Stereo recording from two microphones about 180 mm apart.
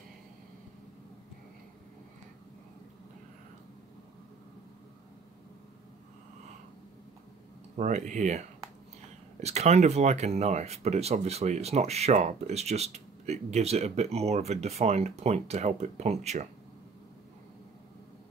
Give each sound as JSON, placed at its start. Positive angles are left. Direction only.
{"t": 7.7, "sound": "speech", "side_deg": -40}